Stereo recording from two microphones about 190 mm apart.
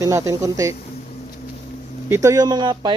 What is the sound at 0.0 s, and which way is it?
Speech, 15° right (ahead or behind).